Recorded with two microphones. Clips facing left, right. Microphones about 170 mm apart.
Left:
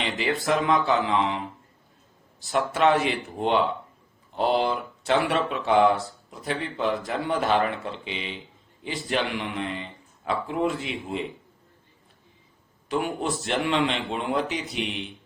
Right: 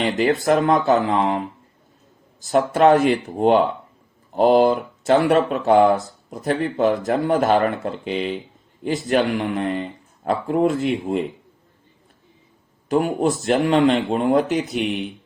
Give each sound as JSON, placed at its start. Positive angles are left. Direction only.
{"t": 0.0, "sound": "speech", "side_deg": -45}
{"t": 2.4, "sound": "speech", "side_deg": -40}
{"t": 12.9, "sound": "speech", "side_deg": -40}